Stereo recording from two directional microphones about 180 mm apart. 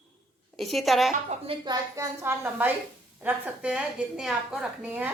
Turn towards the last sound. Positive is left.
turn(degrees=-10)  # may be behind; listen again after turning